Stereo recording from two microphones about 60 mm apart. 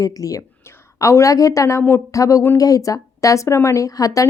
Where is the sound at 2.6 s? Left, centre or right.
Left.